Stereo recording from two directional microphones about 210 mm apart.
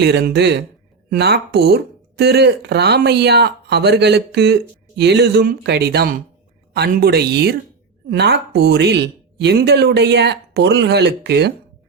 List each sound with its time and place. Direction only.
0.0 s speech: 50° right (ahead or behind)